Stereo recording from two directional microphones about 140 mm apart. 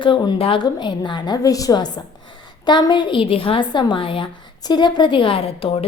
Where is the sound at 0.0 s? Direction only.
35° left (ahead or behind).